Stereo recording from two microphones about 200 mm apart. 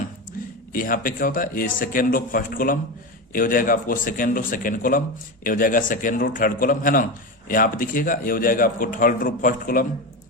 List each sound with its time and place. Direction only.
0.7 s speech: 45° left (ahead or behind)